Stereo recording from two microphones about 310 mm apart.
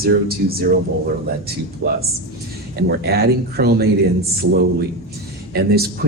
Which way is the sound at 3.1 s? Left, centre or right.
Right.